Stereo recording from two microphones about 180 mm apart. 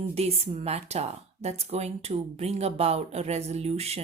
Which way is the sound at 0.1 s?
35° right (ahead or behind).